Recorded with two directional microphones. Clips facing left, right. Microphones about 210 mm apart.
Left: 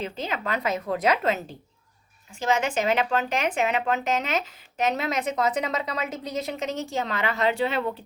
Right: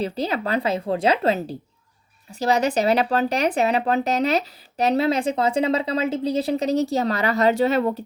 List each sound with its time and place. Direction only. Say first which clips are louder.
0.0 s speech: right 6 dB; 35° right (ahead or behind)